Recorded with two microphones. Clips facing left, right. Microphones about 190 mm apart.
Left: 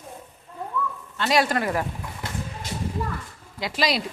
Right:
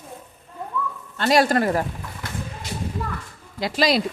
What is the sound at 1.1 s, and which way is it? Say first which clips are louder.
Speech: right 4 dB; 45° right (ahead or behind).